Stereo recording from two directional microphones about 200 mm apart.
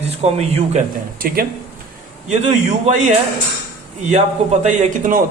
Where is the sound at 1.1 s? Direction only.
45° right (ahead or behind).